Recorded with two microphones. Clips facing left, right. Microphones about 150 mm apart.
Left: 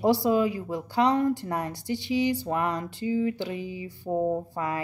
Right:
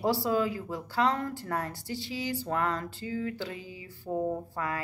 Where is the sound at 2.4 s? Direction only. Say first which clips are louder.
Left 3 dB; 15° left (ahead or behind).